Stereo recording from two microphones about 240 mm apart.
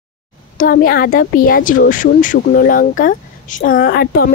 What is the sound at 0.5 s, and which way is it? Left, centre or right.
Speech, left.